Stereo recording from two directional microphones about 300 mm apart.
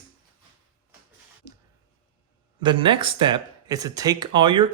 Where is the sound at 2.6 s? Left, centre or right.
Centre.